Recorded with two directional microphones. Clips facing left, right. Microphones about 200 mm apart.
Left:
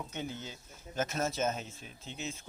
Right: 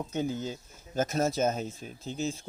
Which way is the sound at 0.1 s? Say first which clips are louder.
Right 9 dB; 40° right (ahead or behind).